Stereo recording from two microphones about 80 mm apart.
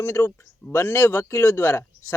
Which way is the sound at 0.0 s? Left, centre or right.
Left.